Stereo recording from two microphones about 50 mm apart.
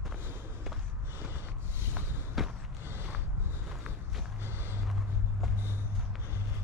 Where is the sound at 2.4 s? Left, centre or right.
Centre.